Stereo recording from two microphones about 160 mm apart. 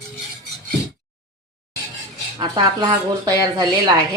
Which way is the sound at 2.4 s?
25° right (ahead or behind).